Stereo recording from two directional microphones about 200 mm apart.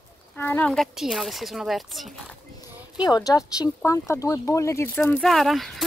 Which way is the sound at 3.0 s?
20° left (ahead or behind).